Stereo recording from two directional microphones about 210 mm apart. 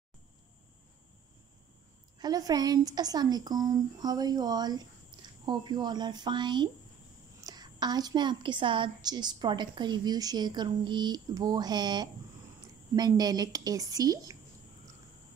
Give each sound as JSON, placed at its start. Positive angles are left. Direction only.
{"t": 2.1, "sound": "a woman's voice", "side_deg": -20}